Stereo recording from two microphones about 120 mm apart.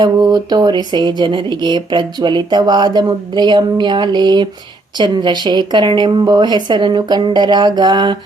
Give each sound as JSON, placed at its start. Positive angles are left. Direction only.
{"t": 0.0, "sound": "speech", "side_deg": -35}